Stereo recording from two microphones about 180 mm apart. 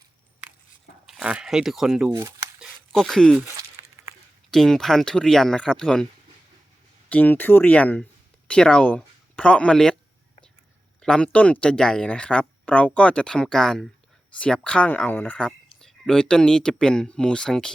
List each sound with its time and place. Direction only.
1.0 s speech: 5° right (ahead or behind)
2.6 s a sound: centre (ahead or behind)
3.4 s a sound: 15° right (ahead or behind)
4.5 s speech: centre (ahead or behind)
7.1 s speech: 10° left (ahead or behind)
11.0 s speech: 5° left (ahead or behind)